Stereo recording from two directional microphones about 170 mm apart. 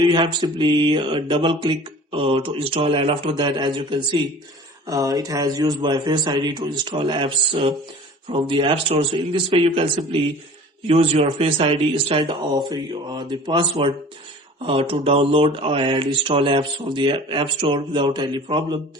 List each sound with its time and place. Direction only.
0.0 s mantra: 25° right (ahead or behind)
8.3 s speech: 30° right (ahead or behind)